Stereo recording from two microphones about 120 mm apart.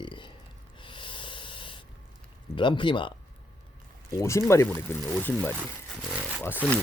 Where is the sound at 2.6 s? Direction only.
40° left (ahead or behind).